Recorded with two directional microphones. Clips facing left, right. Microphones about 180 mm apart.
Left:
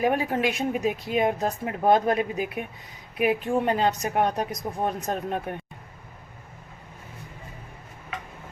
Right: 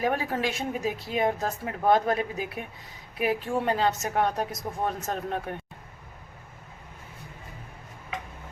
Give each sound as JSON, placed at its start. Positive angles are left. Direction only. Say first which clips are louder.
{"t": 0.0, "sound": "speech", "louder": "left 3 dB", "side_deg": 15}